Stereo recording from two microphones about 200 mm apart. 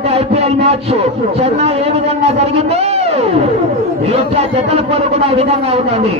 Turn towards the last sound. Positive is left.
turn(degrees=-30)  # may be behind; listen again after turning